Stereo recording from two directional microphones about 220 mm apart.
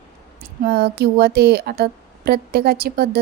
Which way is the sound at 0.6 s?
45° right (ahead or behind).